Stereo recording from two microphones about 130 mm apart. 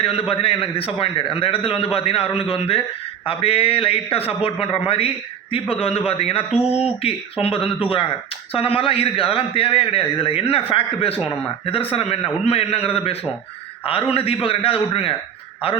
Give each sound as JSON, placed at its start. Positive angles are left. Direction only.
{"t": 0.0, "sound": "a man's voice", "side_deg": 50}